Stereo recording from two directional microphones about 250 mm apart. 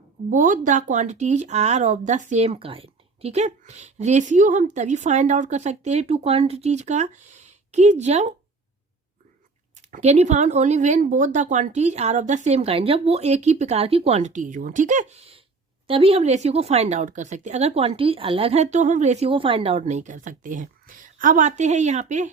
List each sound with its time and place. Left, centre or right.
0.3 s speech: right
9.9 s speech: right